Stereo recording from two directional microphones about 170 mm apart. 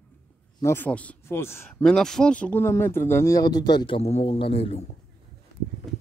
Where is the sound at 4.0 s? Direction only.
40° left (ahead or behind).